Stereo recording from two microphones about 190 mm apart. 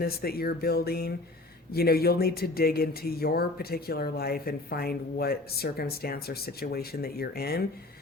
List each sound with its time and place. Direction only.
0.0 s speech: 55° left (ahead or behind)